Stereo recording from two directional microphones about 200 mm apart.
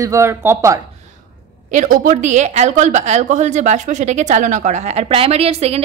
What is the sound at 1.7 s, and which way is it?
A woman's voice, 40° right (ahead or behind).